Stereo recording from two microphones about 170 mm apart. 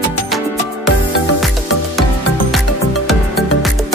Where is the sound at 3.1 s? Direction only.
Centre (ahead or behind).